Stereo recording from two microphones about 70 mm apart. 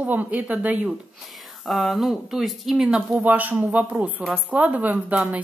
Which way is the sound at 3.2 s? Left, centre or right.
Right.